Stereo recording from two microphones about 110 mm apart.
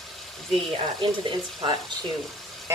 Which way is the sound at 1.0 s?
45° right (ahead or behind).